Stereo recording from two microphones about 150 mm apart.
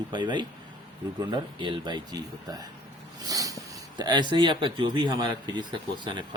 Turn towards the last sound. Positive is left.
turn(degrees=-30)  # may be behind; listen again after turning